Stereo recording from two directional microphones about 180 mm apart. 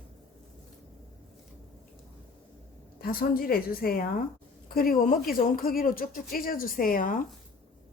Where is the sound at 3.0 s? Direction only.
55° left (ahead or behind).